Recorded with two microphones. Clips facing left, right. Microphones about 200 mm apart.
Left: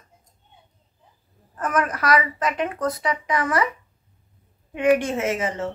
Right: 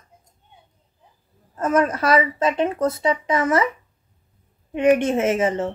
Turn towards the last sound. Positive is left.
turn(degrees=-25)  # may be behind; listen again after turning